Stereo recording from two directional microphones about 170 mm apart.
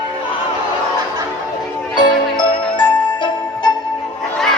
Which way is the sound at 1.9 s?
25° left (ahead or behind).